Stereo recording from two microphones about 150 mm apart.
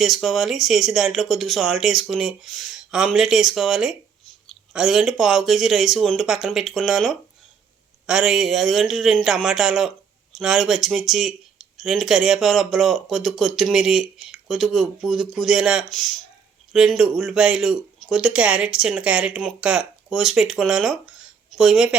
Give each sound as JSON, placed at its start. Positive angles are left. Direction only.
{"t": 0.0, "sound": "speech", "side_deg": 0}